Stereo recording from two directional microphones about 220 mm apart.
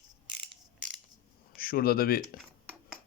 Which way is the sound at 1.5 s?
40° left (ahead or behind).